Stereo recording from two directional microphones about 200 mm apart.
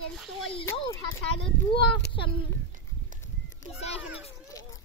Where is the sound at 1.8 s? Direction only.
60° left (ahead or behind).